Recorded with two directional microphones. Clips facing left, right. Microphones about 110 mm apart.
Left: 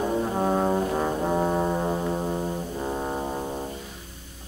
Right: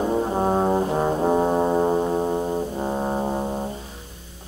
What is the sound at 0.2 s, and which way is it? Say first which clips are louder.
Brass instrument: right 3 dB; 25° right (ahead or behind).